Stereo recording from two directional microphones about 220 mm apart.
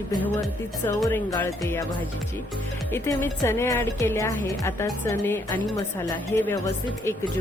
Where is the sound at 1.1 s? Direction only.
15° left (ahead or behind).